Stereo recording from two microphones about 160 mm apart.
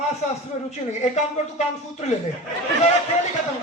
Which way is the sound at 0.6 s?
45° left (ahead or behind).